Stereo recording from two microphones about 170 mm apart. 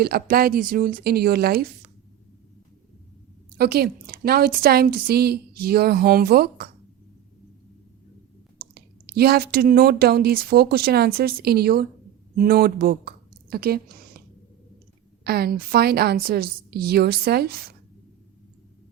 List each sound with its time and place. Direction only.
0.0 s a woman's voice: 65° right (ahead or behind)
3.6 s a woman's voice: 65° right (ahead or behind)
8.5 s speech: 65° right (ahead or behind)
15.2 s a woman's voice: 65° right (ahead or behind)